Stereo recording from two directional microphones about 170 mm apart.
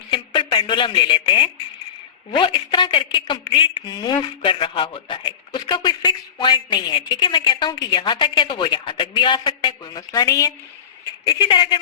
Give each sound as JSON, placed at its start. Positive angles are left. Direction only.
{"t": 0.1, "sound": "a woman's voice", "side_deg": 30}